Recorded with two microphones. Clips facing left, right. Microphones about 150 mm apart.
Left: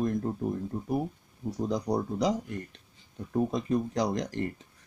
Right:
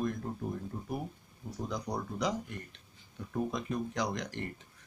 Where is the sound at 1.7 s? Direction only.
35° left (ahead or behind).